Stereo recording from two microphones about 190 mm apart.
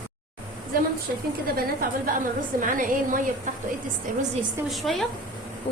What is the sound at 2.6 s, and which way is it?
Speech, 45° right (ahead or behind).